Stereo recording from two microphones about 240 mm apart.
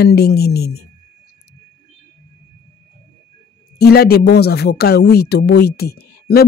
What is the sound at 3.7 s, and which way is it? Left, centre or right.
A man's voice, left.